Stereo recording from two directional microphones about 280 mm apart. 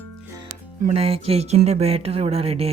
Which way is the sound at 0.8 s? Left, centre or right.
Right.